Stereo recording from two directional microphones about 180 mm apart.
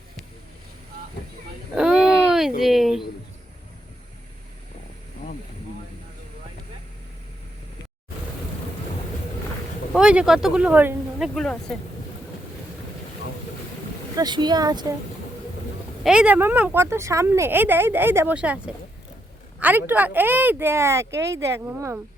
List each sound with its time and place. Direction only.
0.9 s a sound: 55° right (ahead or behind)
1.7 s a sound: 5° right (ahead or behind)
2.6 s speech: centre (ahead or behind)
9.9 s speech: 5° right (ahead or behind)
11.3 s speech: 5° left (ahead or behind)
14.2 s speech: 25° right (ahead or behind)
16.0 s speech: 5° right (ahead or behind)